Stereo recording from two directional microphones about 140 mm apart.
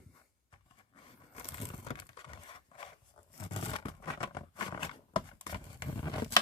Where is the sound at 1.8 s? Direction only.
40° left (ahead or behind).